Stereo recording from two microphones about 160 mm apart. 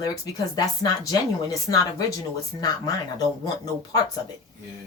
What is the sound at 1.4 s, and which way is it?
Speech, 20° left (ahead or behind).